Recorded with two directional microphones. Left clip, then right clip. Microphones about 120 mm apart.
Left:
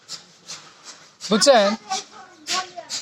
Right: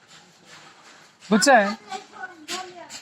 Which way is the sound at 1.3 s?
30° left (ahead or behind).